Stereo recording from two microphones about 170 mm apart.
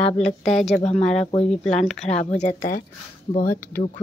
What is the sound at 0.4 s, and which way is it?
Speech, centre (ahead or behind).